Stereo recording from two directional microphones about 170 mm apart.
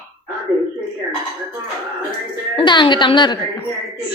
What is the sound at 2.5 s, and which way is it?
Speech, 30° left (ahead or behind).